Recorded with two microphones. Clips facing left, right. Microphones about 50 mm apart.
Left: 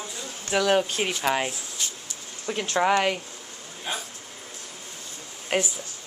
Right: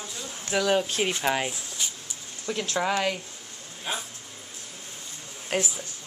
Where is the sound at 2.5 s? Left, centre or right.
Centre.